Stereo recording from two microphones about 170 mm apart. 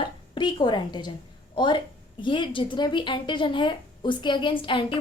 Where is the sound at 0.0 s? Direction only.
25° left (ahead or behind).